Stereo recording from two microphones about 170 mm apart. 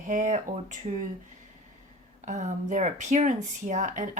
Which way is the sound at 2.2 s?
45° right (ahead or behind).